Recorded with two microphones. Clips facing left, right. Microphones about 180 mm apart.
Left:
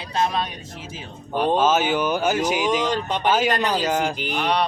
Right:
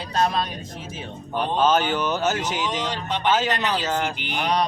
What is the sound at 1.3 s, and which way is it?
Speech, 5° left (ahead or behind).